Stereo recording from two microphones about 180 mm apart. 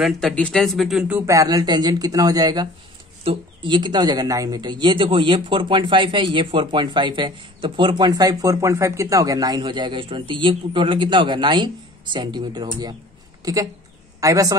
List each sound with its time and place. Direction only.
0.0 s speech: 5° left (ahead or behind); by 12.9 s 25° right (ahead or behind)
13.4 s a sound: 20° right (ahead or behind)
14.2 s speech: 20° right (ahead or behind)